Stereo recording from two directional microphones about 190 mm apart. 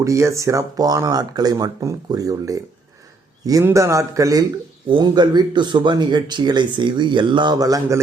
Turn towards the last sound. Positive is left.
turn(degrees=-20)  # may be behind; listen again after turning